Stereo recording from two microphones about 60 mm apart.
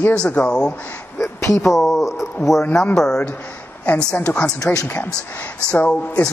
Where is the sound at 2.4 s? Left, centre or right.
Left.